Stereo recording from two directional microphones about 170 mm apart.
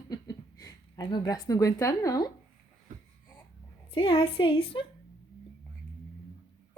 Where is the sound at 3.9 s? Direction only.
30° left (ahead or behind).